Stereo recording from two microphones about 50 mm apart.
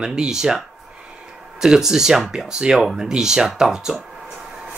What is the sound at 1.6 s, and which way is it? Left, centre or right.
Speech, centre.